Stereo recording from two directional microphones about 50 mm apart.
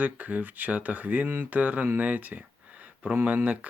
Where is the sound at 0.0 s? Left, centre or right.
Right.